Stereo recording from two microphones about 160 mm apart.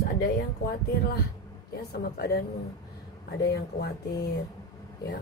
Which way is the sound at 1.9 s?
75° left (ahead or behind).